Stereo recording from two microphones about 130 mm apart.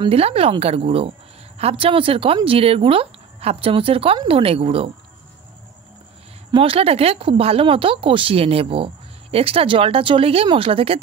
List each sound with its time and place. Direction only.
0.0 s speech: 50° right (ahead or behind)
6.5 s speech: 45° right (ahead or behind)